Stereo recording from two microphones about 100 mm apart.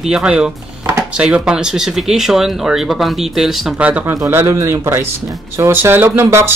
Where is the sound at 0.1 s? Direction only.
10° right (ahead or behind).